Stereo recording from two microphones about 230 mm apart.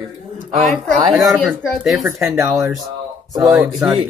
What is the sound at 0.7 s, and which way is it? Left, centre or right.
Speech, right.